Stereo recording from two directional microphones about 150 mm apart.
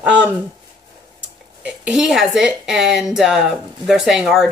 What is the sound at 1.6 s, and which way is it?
Speech, 5° right (ahead or behind).